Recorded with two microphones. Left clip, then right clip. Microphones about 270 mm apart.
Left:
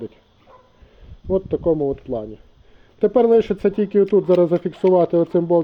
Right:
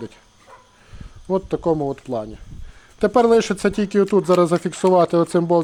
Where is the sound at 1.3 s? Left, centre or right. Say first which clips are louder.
Left 1 dB; right.